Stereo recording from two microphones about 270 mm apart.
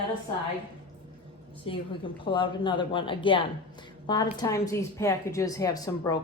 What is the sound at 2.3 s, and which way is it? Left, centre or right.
A woman's voice, centre.